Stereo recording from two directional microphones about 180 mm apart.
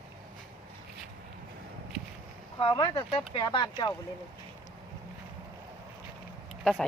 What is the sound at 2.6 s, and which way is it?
Speech, 30° left (ahead or behind).